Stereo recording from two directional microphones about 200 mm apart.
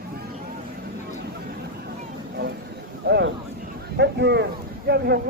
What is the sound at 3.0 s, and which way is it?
Vehicle, 60° right (ahead or behind).